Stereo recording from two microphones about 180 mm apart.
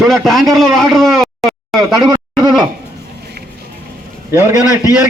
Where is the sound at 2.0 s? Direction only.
20° right (ahead or behind).